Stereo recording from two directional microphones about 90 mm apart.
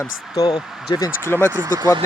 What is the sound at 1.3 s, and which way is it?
Speech, 25° right (ahead or behind).